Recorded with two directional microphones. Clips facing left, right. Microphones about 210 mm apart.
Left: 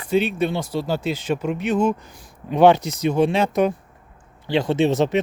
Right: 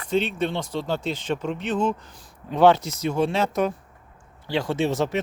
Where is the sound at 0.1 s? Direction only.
10° left (ahead or behind).